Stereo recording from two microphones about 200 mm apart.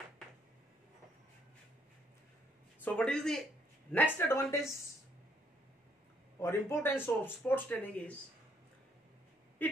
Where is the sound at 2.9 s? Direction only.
5° left (ahead or behind).